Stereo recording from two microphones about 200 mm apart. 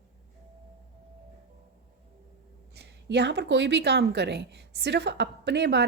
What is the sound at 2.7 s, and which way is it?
A woman's voice, 55° right (ahead or behind).